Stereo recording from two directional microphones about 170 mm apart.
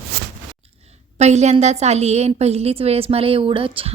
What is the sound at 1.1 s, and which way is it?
A woman's voice, 40° right (ahead or behind).